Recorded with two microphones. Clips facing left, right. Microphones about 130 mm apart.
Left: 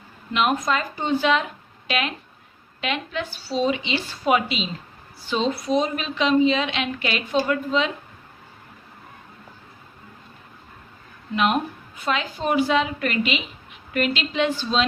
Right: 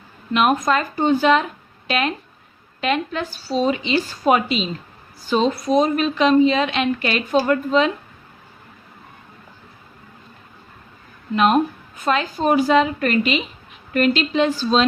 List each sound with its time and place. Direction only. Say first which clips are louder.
0.3 s a woman's voice: right 4 dB; 50° right (ahead or behind)
11.3 s a woman's voice: right 5 dB; 40° right (ahead or behind)